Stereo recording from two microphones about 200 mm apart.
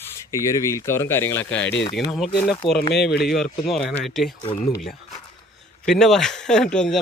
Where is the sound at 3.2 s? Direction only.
Centre (ahead or behind).